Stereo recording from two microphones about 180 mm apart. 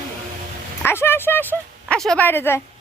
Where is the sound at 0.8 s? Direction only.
15° left (ahead or behind).